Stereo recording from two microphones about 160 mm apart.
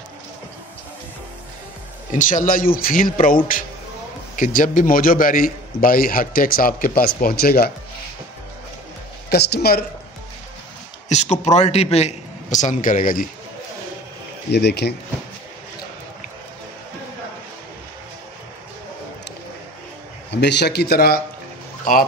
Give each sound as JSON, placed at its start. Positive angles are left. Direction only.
{"t": 2.1, "sound": "a man's voice", "side_deg": 55}
{"t": 9.3, "sound": "speech", "side_deg": 80}
{"t": 11.1, "sound": "a man's voice", "side_deg": 45}
{"t": 14.5, "sound": "a man's voice", "side_deg": 90}
{"t": 20.2, "sound": "a man's voice", "side_deg": 90}